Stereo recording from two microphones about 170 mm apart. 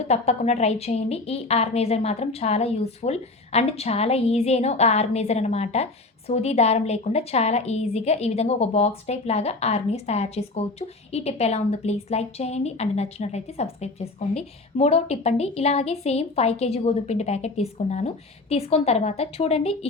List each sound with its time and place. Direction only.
0.1 s a woman's voice: 40° left (ahead or behind)